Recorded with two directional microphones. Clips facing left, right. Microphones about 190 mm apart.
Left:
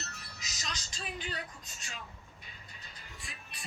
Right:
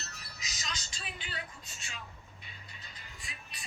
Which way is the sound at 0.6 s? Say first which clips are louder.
Left 2 dB; 45° left (ahead or behind).